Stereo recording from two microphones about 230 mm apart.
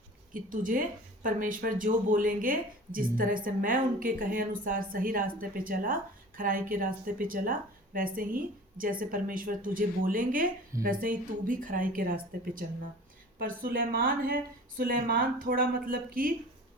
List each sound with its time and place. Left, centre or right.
0.3 s speech: right